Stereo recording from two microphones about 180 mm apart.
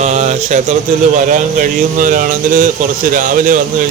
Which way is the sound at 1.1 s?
45° right (ahead or behind).